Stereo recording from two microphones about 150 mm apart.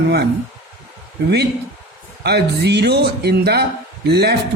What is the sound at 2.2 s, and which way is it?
Speech, 90° right.